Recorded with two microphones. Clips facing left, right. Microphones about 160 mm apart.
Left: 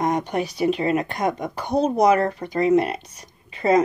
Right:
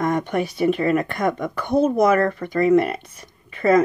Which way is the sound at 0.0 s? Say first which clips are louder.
Right 1 dB; 50° right (ahead or behind).